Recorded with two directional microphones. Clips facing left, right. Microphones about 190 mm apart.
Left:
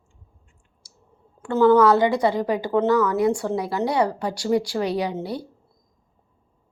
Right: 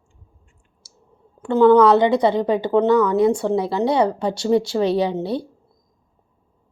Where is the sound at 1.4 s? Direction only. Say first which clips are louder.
Right 3 dB; 20° right (ahead or behind).